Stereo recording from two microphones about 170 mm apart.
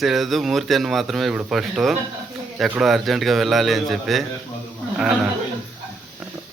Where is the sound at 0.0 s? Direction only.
Centre (ahead or behind).